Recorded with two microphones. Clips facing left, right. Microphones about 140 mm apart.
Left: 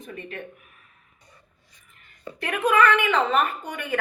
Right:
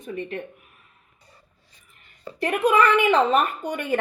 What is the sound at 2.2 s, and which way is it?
Speech, 30° right (ahead or behind).